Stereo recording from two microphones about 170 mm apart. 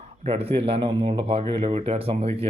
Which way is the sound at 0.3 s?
35° right (ahead or behind).